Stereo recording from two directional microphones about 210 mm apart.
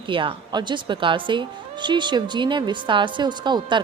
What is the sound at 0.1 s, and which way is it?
A woman's voice, 25° right (ahead or behind).